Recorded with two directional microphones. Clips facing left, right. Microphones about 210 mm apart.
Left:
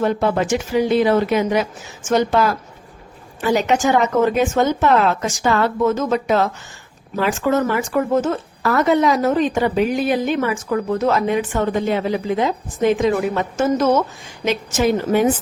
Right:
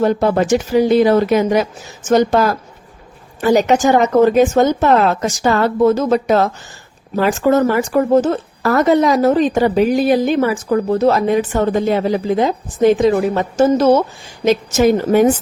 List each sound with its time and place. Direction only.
0.0 s speech: 40° right (ahead or behind)